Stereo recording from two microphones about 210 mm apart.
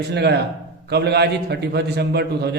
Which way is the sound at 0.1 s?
50° right (ahead or behind).